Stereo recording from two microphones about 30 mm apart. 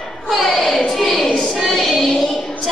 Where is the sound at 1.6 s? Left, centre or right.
Centre.